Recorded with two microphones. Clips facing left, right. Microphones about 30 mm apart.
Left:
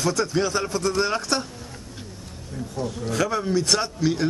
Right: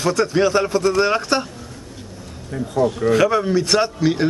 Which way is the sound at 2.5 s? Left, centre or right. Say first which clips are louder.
Right 11 dB; right.